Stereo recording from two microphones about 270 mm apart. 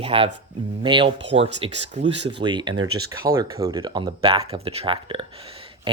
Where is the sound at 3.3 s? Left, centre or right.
Centre.